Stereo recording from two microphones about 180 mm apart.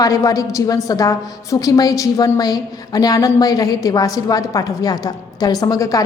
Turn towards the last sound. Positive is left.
turn(degrees=20)  # may be behind; listen again after turning